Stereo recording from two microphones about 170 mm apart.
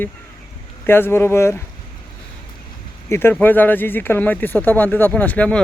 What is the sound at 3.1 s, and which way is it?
Speech, 15° left (ahead or behind).